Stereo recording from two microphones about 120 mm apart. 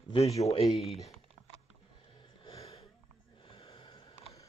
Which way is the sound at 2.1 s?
45° left (ahead or behind).